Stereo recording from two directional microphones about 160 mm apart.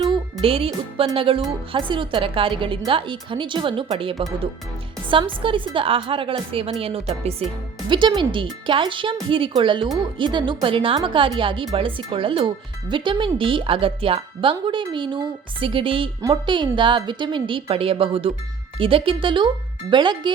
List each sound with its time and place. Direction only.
0.4 s a woman's voice: 35° right (ahead or behind)